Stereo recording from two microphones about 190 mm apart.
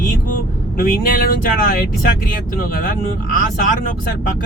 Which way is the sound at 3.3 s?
45° left (ahead or behind).